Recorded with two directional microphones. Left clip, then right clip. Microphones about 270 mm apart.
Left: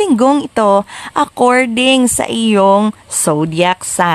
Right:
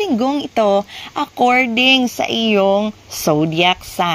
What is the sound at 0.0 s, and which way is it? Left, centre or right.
Speech, left.